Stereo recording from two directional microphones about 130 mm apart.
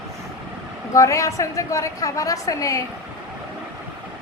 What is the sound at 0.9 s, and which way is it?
A woman's voice, 25° left (ahead or behind).